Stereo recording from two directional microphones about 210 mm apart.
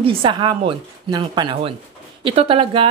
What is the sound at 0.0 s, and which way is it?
A woman's voice, 25° right (ahead or behind).